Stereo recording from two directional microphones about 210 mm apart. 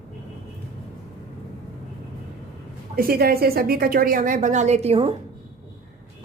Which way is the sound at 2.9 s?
45° right (ahead or behind).